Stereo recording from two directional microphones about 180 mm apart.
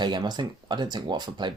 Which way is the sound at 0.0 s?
25° right (ahead or behind).